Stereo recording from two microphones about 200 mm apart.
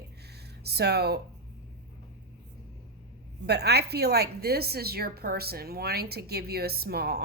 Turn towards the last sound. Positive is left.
turn(degrees=-50)  # may be behind; listen again after turning